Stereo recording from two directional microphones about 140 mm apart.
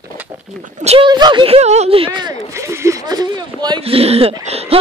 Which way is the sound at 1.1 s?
30° right (ahead or behind).